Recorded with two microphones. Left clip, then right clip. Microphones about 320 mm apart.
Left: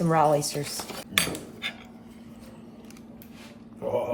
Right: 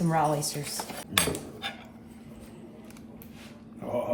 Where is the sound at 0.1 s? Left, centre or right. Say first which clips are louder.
Left 5 dB; left.